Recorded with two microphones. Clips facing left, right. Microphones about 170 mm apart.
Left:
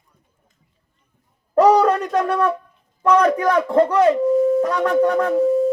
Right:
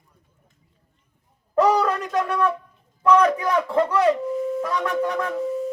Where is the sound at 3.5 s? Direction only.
40° left (ahead or behind).